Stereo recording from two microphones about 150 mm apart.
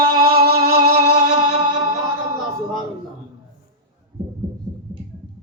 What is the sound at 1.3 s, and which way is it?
Music, 30° right (ahead or behind).